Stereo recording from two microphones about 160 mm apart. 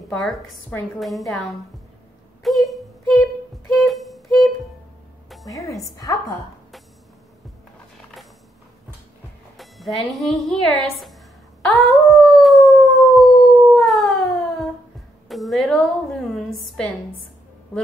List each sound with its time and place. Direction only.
0.1 s a woman's voice: 5° left (ahead or behind)
2.4 s a sound: centre (ahead or behind)
3.7 s music: centre (ahead or behind)
5.5 s a woman's voice: 20° left (ahead or behind)
9.6 s speech: centre (ahead or behind)
11.6 s howl: 5° left (ahead or behind)
15.2 s a woman's voice: centre (ahead or behind)